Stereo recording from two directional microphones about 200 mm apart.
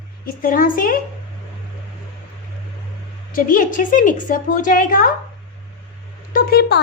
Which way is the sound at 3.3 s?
45° left (ahead or behind).